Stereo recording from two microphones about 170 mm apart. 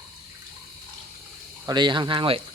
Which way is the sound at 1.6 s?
25° right (ahead or behind).